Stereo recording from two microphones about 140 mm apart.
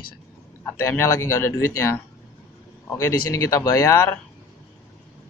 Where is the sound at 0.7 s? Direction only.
20° left (ahead or behind).